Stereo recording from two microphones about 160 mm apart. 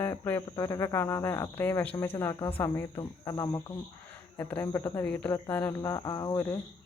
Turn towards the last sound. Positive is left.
turn(degrees=20)  # may be behind; listen again after turning